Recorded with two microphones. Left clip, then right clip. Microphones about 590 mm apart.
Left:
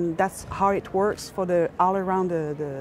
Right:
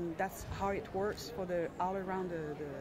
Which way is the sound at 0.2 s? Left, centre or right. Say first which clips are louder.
Left 15 dB; left.